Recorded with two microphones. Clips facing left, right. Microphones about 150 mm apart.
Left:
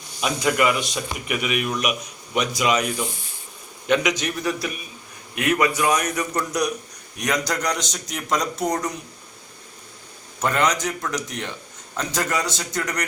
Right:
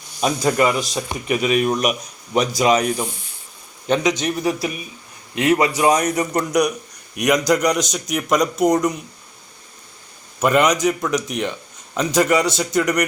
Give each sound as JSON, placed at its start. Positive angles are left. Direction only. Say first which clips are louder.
{"t": 0.2, "sound": "a man's voice", "louder": "right 3 dB", "side_deg": -35}
{"t": 7.2, "sound": "speech", "louder": "right 8 dB", "side_deg": -15}
{"t": 10.4, "sound": "speech", "louder": "right 6 dB", "side_deg": -15}